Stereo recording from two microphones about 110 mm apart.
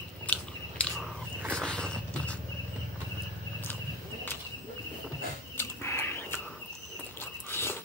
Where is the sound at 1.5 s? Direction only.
10° left (ahead or behind).